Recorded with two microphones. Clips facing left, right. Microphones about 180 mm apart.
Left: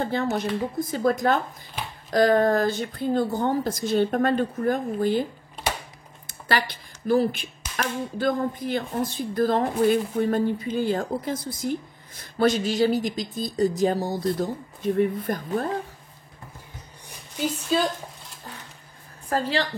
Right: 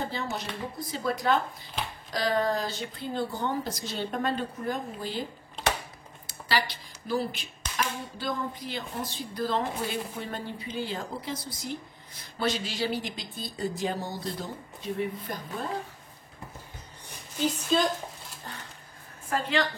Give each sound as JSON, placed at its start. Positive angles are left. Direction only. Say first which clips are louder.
{"t": 0.0, "sound": "speech", "louder": "left 8 dB", "side_deg": 55}
{"t": 6.2, "sound": "speech", "louder": "left 3 dB", "side_deg": 50}
{"t": 17.4, "sound": "a woman's voice", "louder": "left 2 dB", "side_deg": 10}
{"t": 19.2, "sound": "a woman's voice", "louder": "left 3 dB", "side_deg": 35}